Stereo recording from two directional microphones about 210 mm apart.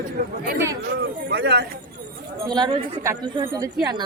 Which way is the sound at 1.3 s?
55° right (ahead or behind).